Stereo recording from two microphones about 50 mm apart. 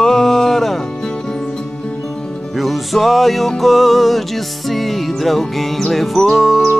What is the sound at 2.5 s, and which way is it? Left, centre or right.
Music, centre.